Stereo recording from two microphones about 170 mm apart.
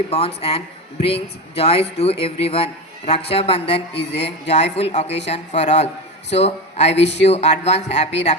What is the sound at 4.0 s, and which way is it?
Speech, 85° left.